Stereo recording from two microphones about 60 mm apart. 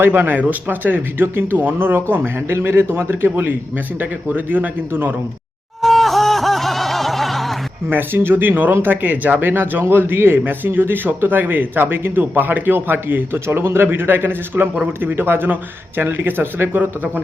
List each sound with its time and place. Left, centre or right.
0.0 s a man's voice: right
5.8 s music: centre
7.9 s a man's voice: right